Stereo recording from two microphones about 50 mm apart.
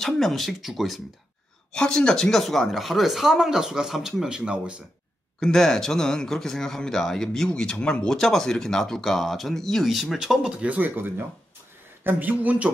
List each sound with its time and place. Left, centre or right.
0.0 s speech: centre
1.7 s speech: centre
4.4 s speech: right
5.4 s speech: centre
9.8 s speech: centre
10.6 s speech: right
12.0 s speech: right